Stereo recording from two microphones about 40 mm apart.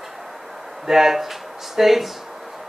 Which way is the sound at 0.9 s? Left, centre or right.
Centre.